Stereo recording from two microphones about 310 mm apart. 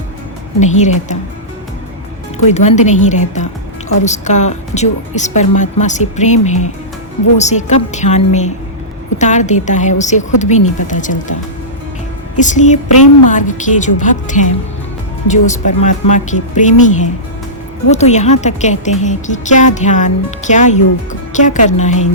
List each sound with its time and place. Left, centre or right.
0.8 s a woman's voice: left
2.5 s a woman's voice: left
12.4 s a woman's voice: left